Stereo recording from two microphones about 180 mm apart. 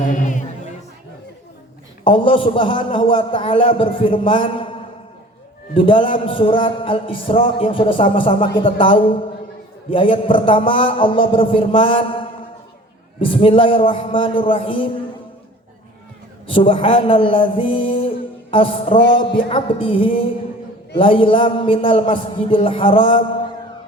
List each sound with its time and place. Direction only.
0.0 s music: 45° left (ahead or behind)
2.0 s a man's voice: 30° left (ahead or behind)
16.5 s a man's voice: 30° left (ahead or behind)